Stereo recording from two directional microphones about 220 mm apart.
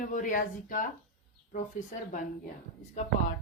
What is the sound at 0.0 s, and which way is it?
Speech, 35° left (ahead or behind).